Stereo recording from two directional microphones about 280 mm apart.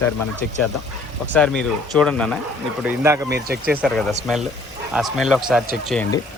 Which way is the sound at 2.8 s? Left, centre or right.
Centre.